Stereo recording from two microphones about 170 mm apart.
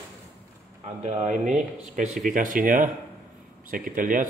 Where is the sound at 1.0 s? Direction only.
45° right (ahead or behind).